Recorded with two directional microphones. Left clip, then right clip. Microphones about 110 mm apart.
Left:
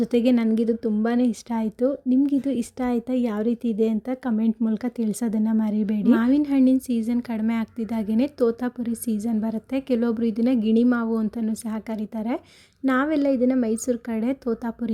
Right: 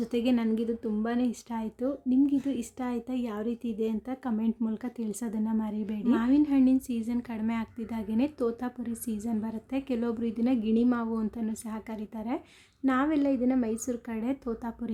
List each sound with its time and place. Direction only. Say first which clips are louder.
0.0 s a woman's voice: left 8 dB; 50° left (ahead or behind)